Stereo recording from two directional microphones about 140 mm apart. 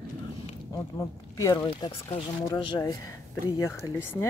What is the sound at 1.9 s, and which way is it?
Speech, 40° left (ahead or behind).